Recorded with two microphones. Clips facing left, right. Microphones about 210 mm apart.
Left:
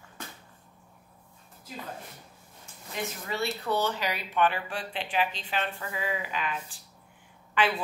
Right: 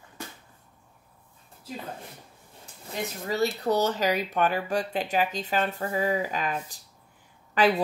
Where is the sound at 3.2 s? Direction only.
40° right (ahead or behind).